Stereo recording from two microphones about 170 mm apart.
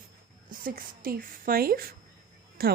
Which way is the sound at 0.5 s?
60° right (ahead or behind).